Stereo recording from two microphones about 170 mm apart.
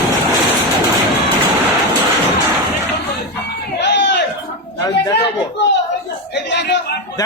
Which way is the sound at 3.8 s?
90° left.